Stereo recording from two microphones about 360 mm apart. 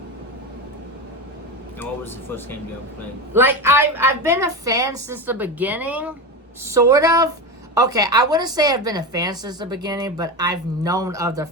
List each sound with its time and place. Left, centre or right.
3.3 s a woman's voice: centre